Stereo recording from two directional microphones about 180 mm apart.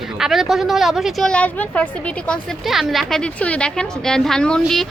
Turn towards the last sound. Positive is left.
turn(degrees=0)  # may be behind; listen again after turning